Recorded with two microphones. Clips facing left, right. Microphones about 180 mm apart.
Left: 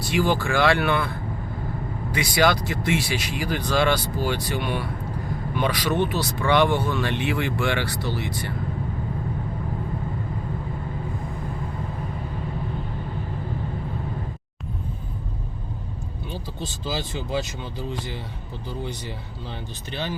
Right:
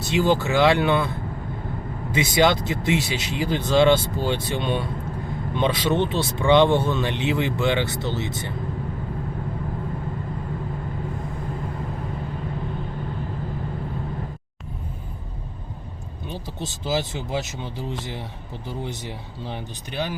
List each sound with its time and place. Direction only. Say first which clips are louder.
0.0 s speech: right 2 dB; 20° right (ahead or behind)
2.1 s speech: right 2 dB; 20° right (ahead or behind)
16.3 s speech: right 2 dB; 20° right (ahead or behind)